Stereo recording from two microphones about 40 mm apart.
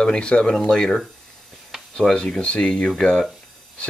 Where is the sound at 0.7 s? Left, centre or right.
Centre.